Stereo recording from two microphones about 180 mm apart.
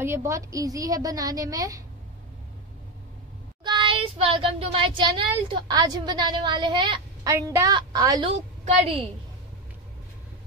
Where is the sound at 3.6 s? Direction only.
25° right (ahead or behind).